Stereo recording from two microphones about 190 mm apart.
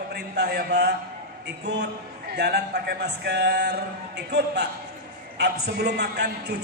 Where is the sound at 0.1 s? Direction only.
55° right (ahead or behind).